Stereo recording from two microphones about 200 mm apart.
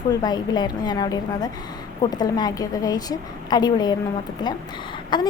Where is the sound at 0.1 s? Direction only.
20° left (ahead or behind).